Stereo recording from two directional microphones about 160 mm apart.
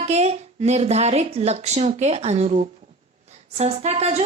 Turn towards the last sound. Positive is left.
turn(degrees=-40)  # may be behind; listen again after turning